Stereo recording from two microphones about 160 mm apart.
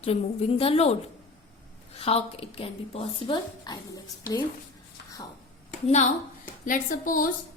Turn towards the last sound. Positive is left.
turn(degrees=60)  # may be behind; listen again after turning